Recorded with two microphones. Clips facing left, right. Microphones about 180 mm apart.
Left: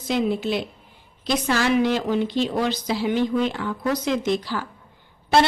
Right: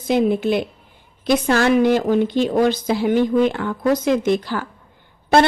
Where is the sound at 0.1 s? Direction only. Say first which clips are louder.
Right 5 dB; 55° right (ahead or behind).